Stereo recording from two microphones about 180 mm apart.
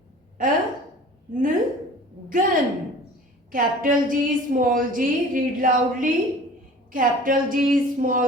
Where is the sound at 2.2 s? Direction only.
50° right (ahead or behind).